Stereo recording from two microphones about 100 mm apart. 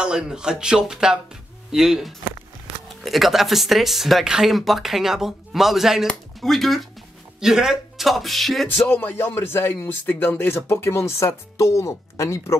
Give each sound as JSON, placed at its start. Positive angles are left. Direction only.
{"t": 0.0, "sound": "speech", "side_deg": -5}
{"t": 8.6, "sound": "a man's voice", "side_deg": 25}